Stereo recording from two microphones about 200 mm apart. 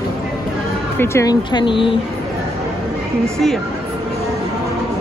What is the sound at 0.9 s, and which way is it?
Speech, 10° left (ahead or behind).